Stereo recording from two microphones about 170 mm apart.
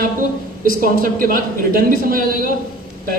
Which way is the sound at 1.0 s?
55° right (ahead or behind).